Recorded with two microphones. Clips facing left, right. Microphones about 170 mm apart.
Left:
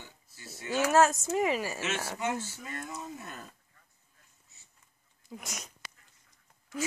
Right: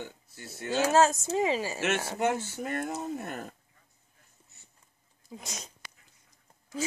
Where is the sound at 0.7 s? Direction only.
25° right (ahead or behind).